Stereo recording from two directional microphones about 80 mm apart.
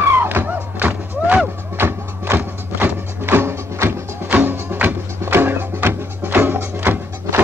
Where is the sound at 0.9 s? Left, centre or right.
Centre.